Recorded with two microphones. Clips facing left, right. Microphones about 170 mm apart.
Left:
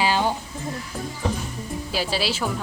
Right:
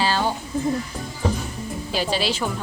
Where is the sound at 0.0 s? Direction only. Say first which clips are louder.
Even; 15° left (ahead or behind).